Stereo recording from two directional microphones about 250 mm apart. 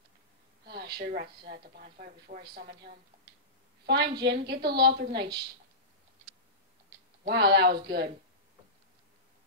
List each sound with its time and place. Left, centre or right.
0.7 s speech: right
3.8 s a woman's voice: right
7.2 s speech: right